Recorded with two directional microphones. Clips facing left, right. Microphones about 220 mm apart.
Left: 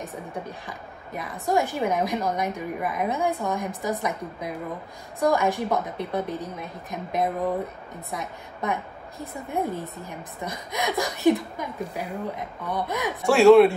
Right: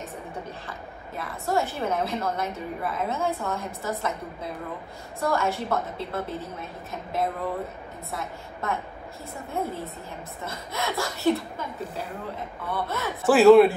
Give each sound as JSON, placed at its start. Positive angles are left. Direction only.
{"t": 0.7, "sound": "a woman's voice", "side_deg": 15}
{"t": 13.2, "sound": "speech", "side_deg": 0}